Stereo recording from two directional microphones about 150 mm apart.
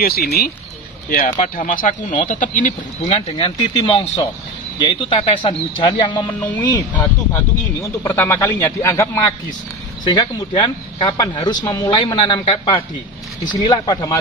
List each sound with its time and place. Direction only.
0.0 s speech: 90° left
1.1 s speech: 60° left (ahead or behind); by 9.3 s 20° left (ahead or behind)
10.0 s speech: 30° left (ahead or behind)